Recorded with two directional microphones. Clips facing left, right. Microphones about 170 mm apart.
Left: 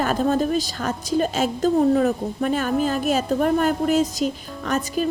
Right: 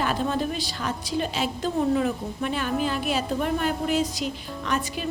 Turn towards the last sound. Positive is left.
turn(degrees=45)  # may be behind; listen again after turning